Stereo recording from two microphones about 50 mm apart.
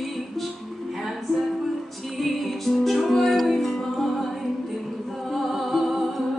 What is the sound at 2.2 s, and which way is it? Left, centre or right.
Music, centre.